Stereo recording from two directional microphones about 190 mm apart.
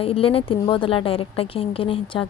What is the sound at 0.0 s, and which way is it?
A woman's voice, 30° left (ahead or behind).